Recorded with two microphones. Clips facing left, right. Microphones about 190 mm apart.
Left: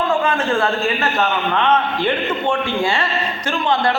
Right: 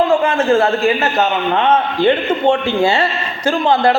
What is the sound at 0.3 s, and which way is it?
Speech, 25° right (ahead or behind).